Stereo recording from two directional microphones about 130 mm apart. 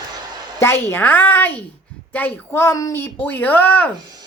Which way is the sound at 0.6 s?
20° left (ahead or behind).